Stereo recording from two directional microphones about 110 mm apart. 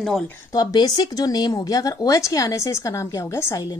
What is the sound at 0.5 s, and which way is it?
A woman's voice, 35° left (ahead or behind).